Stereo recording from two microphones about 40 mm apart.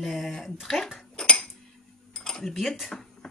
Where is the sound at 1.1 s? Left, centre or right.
Centre.